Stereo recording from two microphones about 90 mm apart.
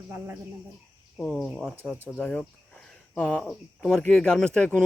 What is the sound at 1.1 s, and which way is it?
Speech, 5° left (ahead or behind).